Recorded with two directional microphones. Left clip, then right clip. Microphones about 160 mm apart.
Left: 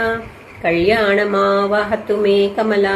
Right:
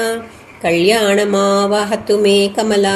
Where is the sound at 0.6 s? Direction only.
45° right (ahead or behind).